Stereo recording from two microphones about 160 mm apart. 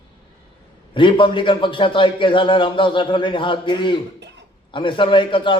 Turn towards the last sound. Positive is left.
turn(degrees=30)  # may be behind; listen again after turning